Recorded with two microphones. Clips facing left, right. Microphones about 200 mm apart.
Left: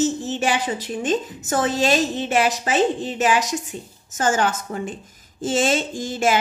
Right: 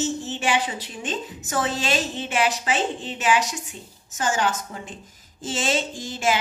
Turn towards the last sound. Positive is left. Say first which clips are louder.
# left 4 dB
turn(degrees=50)  # may be behind; listen again after turning